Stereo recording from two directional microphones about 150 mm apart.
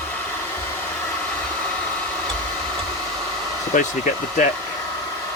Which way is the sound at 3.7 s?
60° left (ahead or behind).